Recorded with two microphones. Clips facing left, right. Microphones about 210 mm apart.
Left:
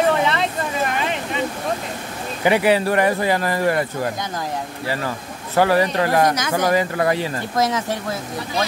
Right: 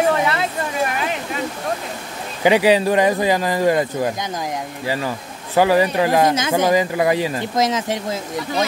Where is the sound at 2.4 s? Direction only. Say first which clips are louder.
Right 2 dB; 20° right (ahead or behind).